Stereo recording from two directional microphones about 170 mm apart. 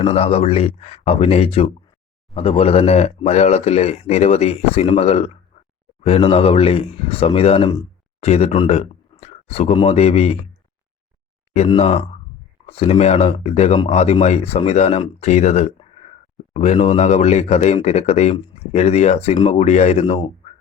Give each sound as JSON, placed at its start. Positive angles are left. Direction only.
{"t": 0.0, "sound": "speech", "side_deg": 35}
{"t": 8.2, "sound": "speech", "side_deg": 40}
{"t": 11.8, "sound": "speech", "side_deg": 35}